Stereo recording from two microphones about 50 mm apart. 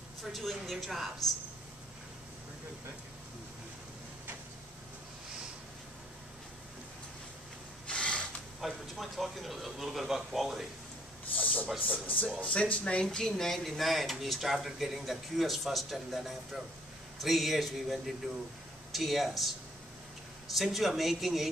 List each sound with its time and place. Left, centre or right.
0.2 s speech: centre
7.8 s a sound: left
8.5 s speech: centre
11.3 s a sound: left
12.4 s speech: left
13.0 s speech: centre
20.5 s speech: centre